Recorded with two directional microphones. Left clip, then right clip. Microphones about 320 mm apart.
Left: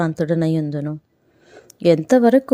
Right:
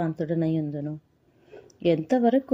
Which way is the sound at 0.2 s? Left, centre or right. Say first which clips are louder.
Left 7 dB; left.